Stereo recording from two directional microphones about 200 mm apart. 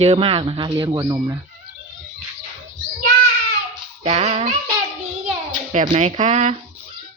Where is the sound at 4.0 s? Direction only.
30° right (ahead or behind).